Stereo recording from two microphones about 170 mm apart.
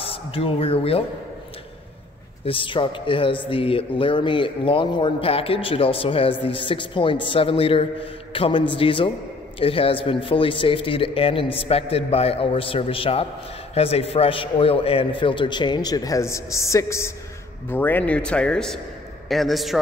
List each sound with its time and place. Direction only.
0.0 s speech: 35° left (ahead or behind)
2.4 s a man's voice: 30° left (ahead or behind); by 19.8 s centre (ahead or behind)